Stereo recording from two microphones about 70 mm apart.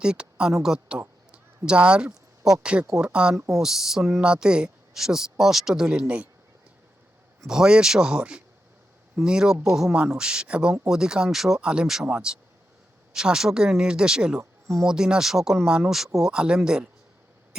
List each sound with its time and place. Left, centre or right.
0.0 s speech: centre
7.4 s speech: centre
14.3 s speech: right
14.8 s speech: centre